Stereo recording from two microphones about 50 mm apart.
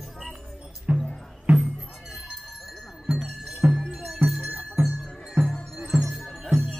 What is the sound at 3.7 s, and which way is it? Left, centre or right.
Music, centre.